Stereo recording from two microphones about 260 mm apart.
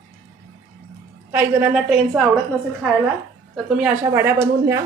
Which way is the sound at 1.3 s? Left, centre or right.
Centre.